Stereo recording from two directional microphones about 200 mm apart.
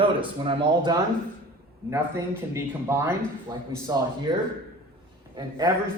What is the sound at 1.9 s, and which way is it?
A man's voice, 15° right (ahead or behind).